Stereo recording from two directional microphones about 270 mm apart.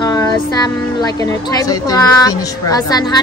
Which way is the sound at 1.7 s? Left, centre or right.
Centre.